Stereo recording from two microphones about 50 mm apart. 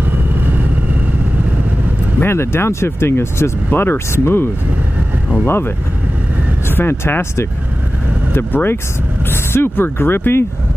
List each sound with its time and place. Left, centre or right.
2.1 s speech: left
6.7 s speech: left